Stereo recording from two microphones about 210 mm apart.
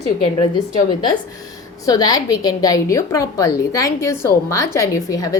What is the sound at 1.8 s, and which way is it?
A woman's voice, 20° left (ahead or behind).